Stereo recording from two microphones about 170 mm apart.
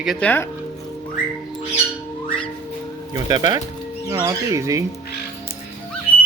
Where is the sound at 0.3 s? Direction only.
15° left (ahead or behind).